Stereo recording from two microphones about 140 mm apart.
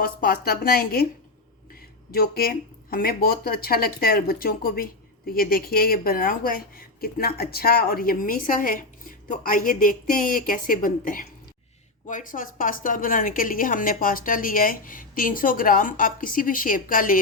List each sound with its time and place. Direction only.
0.0 s speech: 90° left
2.1 s a woman's voice: 90° left